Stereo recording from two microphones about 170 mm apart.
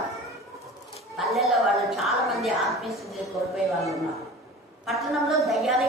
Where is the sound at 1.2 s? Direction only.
Centre (ahead or behind).